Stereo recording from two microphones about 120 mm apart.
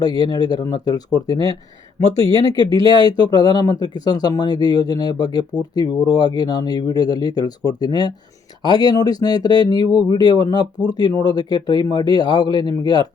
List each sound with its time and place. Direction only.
0.0 s speech: 35° left (ahead or behind)